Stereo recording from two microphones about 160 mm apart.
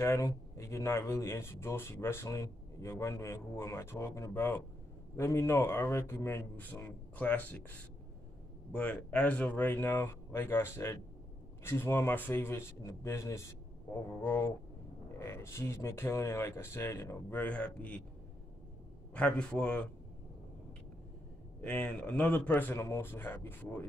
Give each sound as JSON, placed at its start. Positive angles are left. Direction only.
{"t": 0.0, "sound": "speech", "side_deg": 20}
{"t": 19.1, "sound": "speech", "side_deg": 5}
{"t": 21.5, "sound": "speech", "side_deg": 10}